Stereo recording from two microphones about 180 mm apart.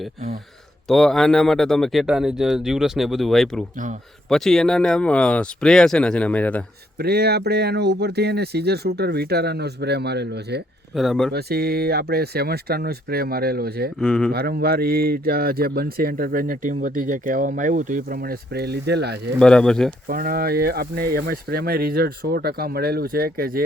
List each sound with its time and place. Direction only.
0.9 s speech: centre (ahead or behind)
7.0 s speech: 60° right (ahead or behind)
10.9 s speech: centre (ahead or behind)
11.3 s speech: 60° right (ahead or behind)
14.0 s speech: 5° left (ahead or behind)
14.3 s speech: 60° right (ahead or behind)
19.4 s speech: 5° left (ahead or behind)
20.1 s speech: 55° right (ahead or behind)